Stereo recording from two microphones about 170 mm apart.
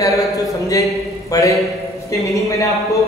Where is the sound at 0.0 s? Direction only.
20° left (ahead or behind).